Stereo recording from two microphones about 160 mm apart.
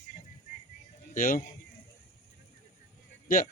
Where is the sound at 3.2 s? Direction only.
60° left (ahead or behind).